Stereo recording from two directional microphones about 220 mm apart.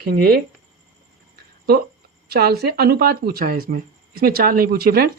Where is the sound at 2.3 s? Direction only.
45° right (ahead or behind).